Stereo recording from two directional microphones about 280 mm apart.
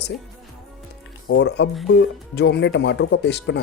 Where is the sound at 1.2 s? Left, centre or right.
Left.